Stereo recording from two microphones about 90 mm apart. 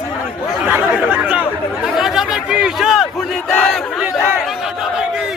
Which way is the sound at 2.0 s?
5° right (ahead or behind).